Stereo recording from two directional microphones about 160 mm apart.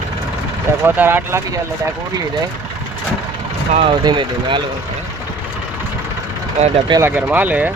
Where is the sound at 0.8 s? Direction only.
15° right (ahead or behind).